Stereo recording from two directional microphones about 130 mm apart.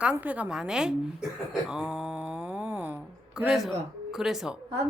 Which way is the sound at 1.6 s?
5° right (ahead or behind).